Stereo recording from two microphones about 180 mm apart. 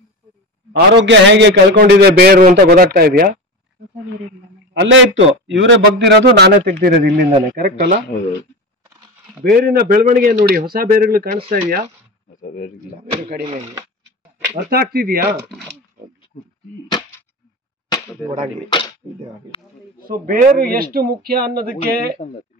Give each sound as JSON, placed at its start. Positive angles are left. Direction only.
{"t": 0.7, "sound": "a man's voice", "side_deg": -85}
{"t": 4.7, "sound": "a man's voice", "side_deg": -90}
{"t": 6.8, "sound": "a man's voice", "side_deg": -55}
{"t": 9.4, "sound": "a man's voice", "side_deg": -55}
{"t": 12.4, "sound": "speech", "side_deg": 50}
{"t": 13.0, "sound": "speech", "side_deg": -35}
{"t": 14.5, "sound": "a man's voice", "side_deg": -55}
{"t": 17.9, "sound": "a sound", "side_deg": 15}
{"t": 18.7, "sound": "speech", "side_deg": 25}
{"t": 20.0, "sound": "a man's voice", "side_deg": -50}